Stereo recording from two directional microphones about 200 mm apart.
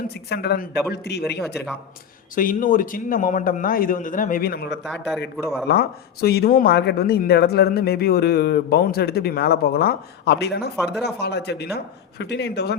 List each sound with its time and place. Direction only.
0.3 s speech: 50° left (ahead or behind)
2.3 s speech: 45° left (ahead or behind)
4.8 s a man's voice: centre (ahead or behind)
5.6 s speech: 50° left (ahead or behind)